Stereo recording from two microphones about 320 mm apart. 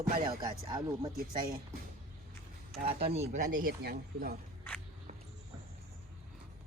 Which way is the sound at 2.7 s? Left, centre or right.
Right.